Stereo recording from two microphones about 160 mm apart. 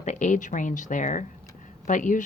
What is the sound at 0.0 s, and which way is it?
Speech, 50° left (ahead or behind).